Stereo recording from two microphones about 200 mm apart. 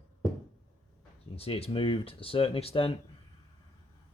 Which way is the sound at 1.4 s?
30° left (ahead or behind).